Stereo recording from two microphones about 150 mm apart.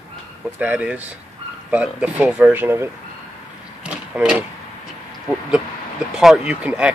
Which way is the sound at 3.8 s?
5° right (ahead or behind).